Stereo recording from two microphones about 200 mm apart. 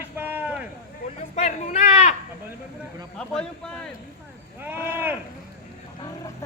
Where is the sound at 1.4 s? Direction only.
35° left (ahead or behind).